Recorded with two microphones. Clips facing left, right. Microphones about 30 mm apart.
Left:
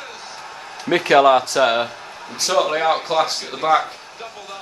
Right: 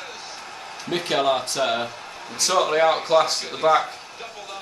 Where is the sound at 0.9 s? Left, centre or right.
Left.